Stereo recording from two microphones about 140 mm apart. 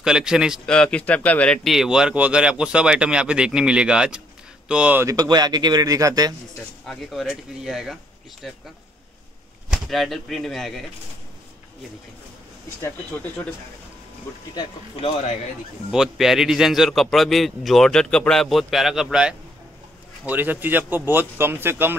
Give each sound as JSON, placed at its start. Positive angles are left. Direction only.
{"t": 0.0, "sound": "a man's voice", "side_deg": -5}
{"t": 0.7, "sound": "speech", "side_deg": 5}
{"t": 5.0, "sound": "a man's voice", "side_deg": -30}
{"t": 6.9, "sound": "a man's voice", "side_deg": 0}
{"t": 9.7, "sound": "a man's voice", "side_deg": 0}
{"t": 12.8, "sound": "speech", "side_deg": 15}
{"t": 15.9, "sound": "a man's voice", "side_deg": -5}